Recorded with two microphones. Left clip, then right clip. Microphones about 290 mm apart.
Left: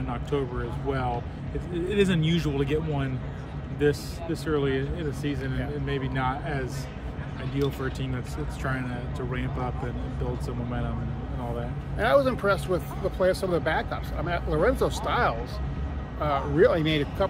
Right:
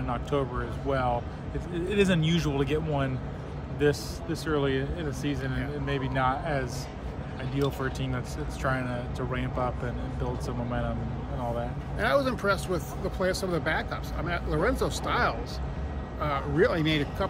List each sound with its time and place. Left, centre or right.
0.1 s speech: centre
7.8 s speech: centre
12.0 s speech: centre